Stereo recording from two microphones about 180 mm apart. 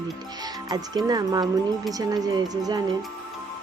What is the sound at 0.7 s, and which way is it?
Speech, 20° right (ahead or behind).